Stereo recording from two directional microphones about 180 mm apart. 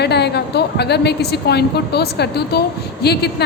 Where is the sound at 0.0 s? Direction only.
65° left (ahead or behind).